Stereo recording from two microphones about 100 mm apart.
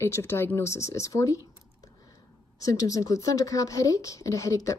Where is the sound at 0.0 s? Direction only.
25° left (ahead or behind).